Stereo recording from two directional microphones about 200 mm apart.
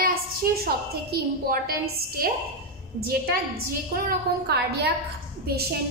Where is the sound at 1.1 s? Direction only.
50° right (ahead or behind).